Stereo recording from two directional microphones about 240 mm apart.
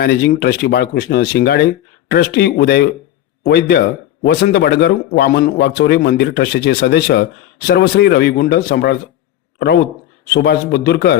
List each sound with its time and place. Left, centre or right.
0.0 s a man's voice: left
10.2 s a man's voice: left